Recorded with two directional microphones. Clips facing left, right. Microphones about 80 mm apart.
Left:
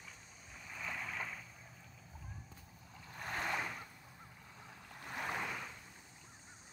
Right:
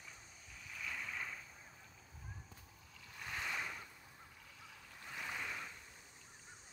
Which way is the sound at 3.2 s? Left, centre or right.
Left.